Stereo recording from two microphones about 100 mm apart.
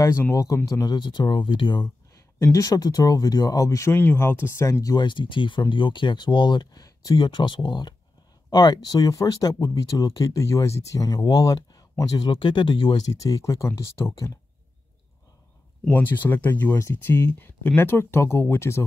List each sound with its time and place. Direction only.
0.3 s speech: 35° left (ahead or behind)
0.9 s speech: 50° left (ahead or behind)
2.3 s speech: 30° left (ahead or behind)
4.9 s speech: 50° left (ahead or behind)
7.2 s speech: 50° left (ahead or behind)
12.2 s speech: 50° left (ahead or behind); by 14.4 s 35° left (ahead or behind)
15.9 s speech: 20° left (ahead or behind)